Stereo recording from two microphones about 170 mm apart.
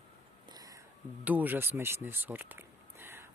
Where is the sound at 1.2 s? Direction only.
10° right (ahead or behind).